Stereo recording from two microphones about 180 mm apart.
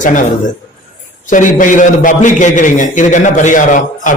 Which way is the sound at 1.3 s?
45° left (ahead or behind).